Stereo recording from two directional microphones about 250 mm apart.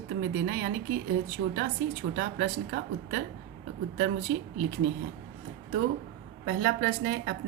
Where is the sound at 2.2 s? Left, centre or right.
Right.